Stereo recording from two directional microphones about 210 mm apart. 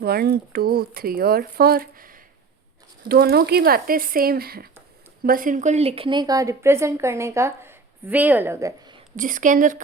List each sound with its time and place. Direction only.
0.0 s a woman's voice: 50° right (ahead or behind); by 9.0 s 15° right (ahead or behind)
9.1 s a woman's voice: 40° right (ahead or behind)